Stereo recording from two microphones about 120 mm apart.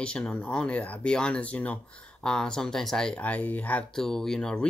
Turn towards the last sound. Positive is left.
turn(degrees=5)  # may be behind; listen again after turning